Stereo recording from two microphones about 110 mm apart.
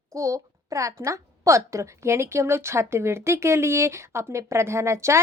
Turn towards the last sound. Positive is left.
turn(degrees=-25)  # may be behind; listen again after turning